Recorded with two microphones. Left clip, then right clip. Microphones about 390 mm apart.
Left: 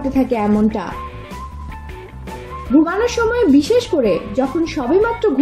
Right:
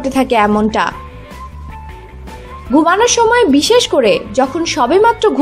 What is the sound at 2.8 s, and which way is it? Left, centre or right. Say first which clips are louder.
A woman's voice: right 7 dB; centre.